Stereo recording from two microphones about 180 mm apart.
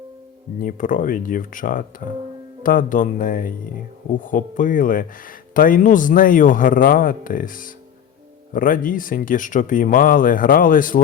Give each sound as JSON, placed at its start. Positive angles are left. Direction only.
{"t": 0.6, "sound": "speech", "side_deg": 45}